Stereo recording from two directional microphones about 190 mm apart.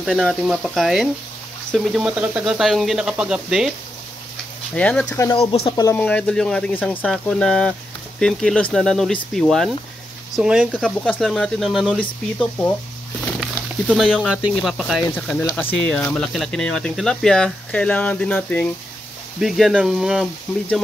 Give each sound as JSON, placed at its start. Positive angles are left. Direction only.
{"t": 0.0, "sound": "speech", "side_deg": 0}
{"t": 4.7, "sound": "speech", "side_deg": 5}
{"t": 5.3, "sound": "speech", "side_deg": 30}
{"t": 5.8, "sound": "speech", "side_deg": 10}